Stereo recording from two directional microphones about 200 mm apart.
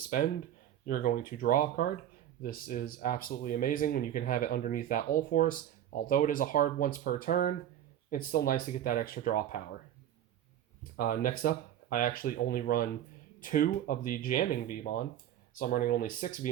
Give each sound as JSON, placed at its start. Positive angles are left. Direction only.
{"t": 0.0, "sound": "speech", "side_deg": 45}
{"t": 10.9, "sound": "speech", "side_deg": 45}
{"t": 15.5, "sound": "speech", "side_deg": 45}